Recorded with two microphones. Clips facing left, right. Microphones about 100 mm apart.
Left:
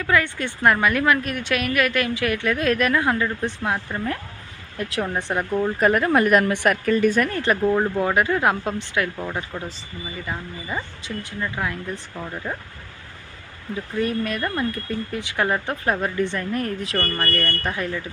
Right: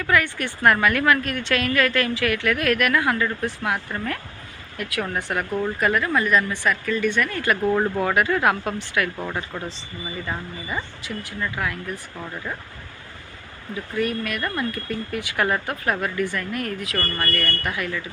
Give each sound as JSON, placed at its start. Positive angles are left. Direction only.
{"t": 0.1, "sound": "a woman's voice", "side_deg": 20}
{"t": 4.8, "sound": "a woman's voice", "side_deg": 30}
{"t": 5.8, "sound": "speech", "side_deg": 40}
{"t": 7.6, "sound": "speech", "side_deg": 0}
{"t": 8.0, "sound": "a woman's voice", "side_deg": 20}
{"t": 9.5, "sound": "speech", "side_deg": 5}
{"t": 10.7, "sound": "a woman's voice", "side_deg": 20}
{"t": 13.9, "sound": "a woman's voice", "side_deg": 30}